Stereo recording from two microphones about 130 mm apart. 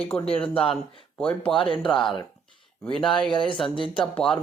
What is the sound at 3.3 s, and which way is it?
Speech, 40° left (ahead or behind).